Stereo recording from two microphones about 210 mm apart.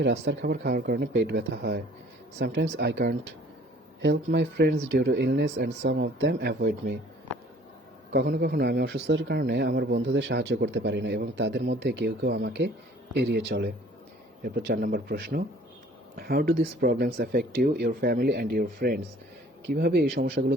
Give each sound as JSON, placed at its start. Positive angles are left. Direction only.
{"t": 0.0, "sound": "speech", "side_deg": -55}
{"t": 8.1, "sound": "speech", "side_deg": -50}